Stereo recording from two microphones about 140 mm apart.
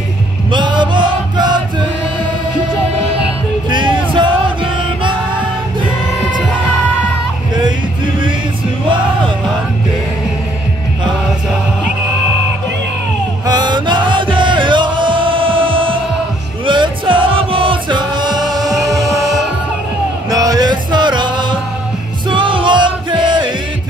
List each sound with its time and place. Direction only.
0.5 s music: 35° right (ahead or behind)
3.7 s music: 35° right (ahead or behind)
7.6 s music: 35° right (ahead or behind)
13.5 s music: 30° right (ahead or behind)